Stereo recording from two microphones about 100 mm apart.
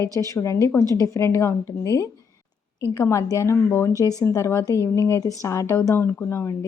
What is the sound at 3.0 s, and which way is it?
A woman's voice, 35° left (ahead or behind).